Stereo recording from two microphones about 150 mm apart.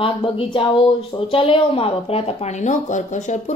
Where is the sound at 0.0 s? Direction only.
35° left (ahead or behind).